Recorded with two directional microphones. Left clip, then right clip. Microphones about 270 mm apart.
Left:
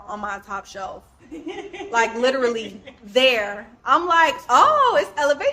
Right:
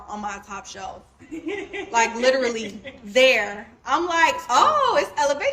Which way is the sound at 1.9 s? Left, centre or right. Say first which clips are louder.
Even; centre.